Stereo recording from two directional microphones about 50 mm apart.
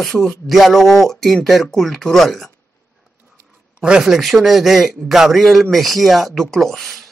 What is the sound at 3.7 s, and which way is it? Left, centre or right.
Speech, centre.